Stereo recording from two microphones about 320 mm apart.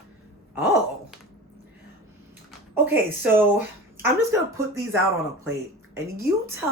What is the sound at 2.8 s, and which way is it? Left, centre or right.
A woman's voice, centre.